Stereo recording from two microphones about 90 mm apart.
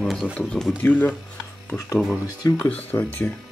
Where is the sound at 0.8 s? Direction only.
20° left (ahead or behind).